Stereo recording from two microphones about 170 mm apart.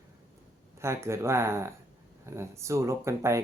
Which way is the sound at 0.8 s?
15° right (ahead or behind).